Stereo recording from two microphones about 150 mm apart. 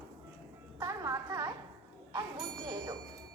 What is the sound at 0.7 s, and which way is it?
Music, 20° right (ahead or behind).